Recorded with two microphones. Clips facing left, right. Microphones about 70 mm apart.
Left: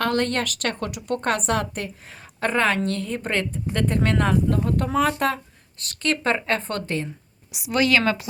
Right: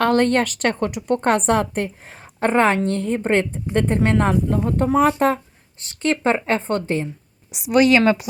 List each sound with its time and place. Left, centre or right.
0.0 s a woman's voice: right; by 8.3 s centre